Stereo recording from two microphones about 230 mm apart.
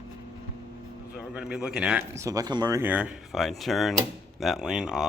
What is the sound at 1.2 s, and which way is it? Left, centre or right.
A man's voice, centre.